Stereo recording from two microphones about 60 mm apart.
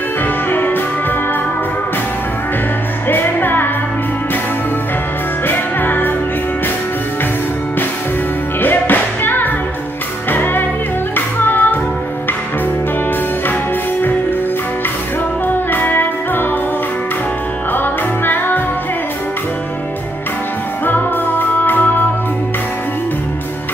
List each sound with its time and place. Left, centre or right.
0.5 s music: left
3.1 s music: left
5.5 s music: left
8.5 s music: left
15.4 s music: left
17.7 s music: left
20.8 s music: left